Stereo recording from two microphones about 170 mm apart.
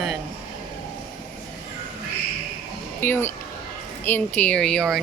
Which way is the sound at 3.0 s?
15° left (ahead or behind).